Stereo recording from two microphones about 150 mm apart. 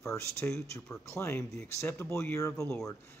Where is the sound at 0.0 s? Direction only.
20° left (ahead or behind).